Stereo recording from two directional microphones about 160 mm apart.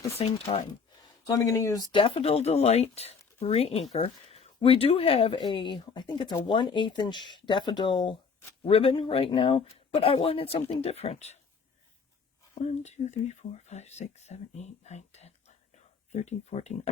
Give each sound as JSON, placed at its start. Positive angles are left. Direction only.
{"t": 0.2, "sound": "speech", "side_deg": 35}
{"t": 1.3, "sound": "speech", "side_deg": 20}
{"t": 12.5, "sound": "speech", "side_deg": 45}